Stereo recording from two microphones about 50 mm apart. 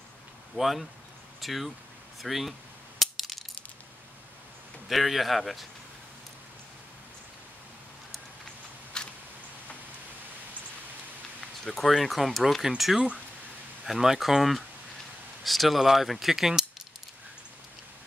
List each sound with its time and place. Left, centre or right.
0.6 s speech: centre
3.0 s coin: centre
4.8 s speech: centre
9.0 s a sound: centre
11.4 s speech: centre